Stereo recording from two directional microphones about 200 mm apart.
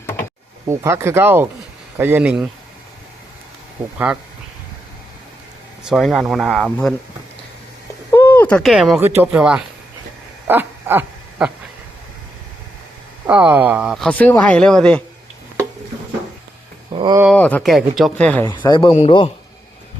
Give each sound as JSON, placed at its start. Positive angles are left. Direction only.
{"t": 0.0, "sound": "a sound", "side_deg": 10}
{"t": 0.7, "sound": "speech", "side_deg": -15}
{"t": 3.9, "sound": "speech", "side_deg": -5}
{"t": 5.8, "sound": "speech", "side_deg": 0}
{"t": 8.1, "sound": "a sound", "side_deg": 10}
{"t": 9.0, "sound": "speech", "side_deg": -10}
{"t": 10.4, "sound": "dog", "side_deg": -10}
{"t": 13.2, "sound": "speech", "side_deg": -10}
{"t": 16.9, "sound": "a sound", "side_deg": -25}
{"t": 17.3, "sound": "speech", "side_deg": 5}
{"t": 18.6, "sound": "a man's voice", "side_deg": 20}